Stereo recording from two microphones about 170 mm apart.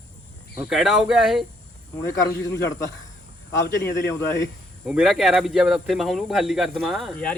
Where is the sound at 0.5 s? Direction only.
5° right (ahead or behind).